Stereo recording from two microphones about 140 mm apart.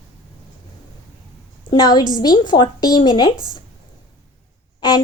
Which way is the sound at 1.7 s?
30° left (ahead or behind).